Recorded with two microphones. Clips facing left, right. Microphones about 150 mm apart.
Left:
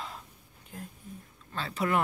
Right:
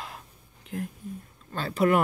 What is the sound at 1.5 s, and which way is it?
Speech, 45° right (ahead or behind).